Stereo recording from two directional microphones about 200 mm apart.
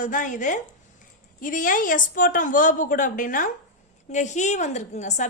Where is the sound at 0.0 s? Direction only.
40° left (ahead or behind).